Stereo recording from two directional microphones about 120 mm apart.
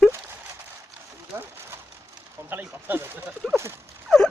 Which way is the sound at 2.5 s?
15° right (ahead or behind).